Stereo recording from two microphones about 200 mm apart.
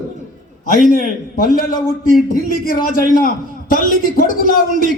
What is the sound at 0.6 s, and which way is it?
A man's voice, 45° left (ahead or behind).